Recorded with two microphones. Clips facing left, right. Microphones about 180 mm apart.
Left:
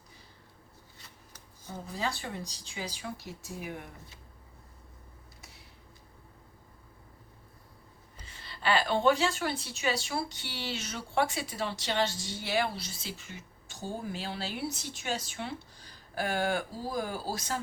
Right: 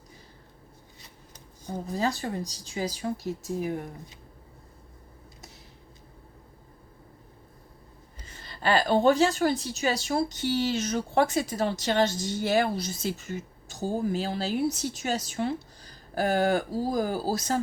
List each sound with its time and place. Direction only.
0.9 s shuffling cards: 20° right (ahead or behind)
1.9 s a woman's voice: 40° right (ahead or behind)
8.3 s a woman's voice: 45° right (ahead or behind)